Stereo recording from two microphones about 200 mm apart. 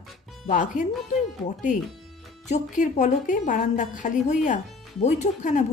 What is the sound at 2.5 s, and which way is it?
A woman's voice, 40° left (ahead or behind).